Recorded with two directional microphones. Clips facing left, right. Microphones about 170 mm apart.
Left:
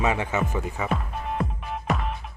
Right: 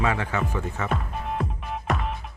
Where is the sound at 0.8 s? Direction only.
Centre (ahead or behind).